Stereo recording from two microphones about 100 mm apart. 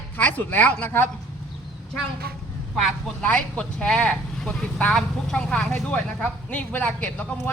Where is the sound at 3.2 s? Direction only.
15° left (ahead or behind).